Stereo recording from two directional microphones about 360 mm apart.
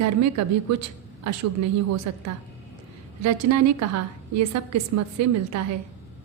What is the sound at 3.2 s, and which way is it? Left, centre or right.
A woman's voice, right.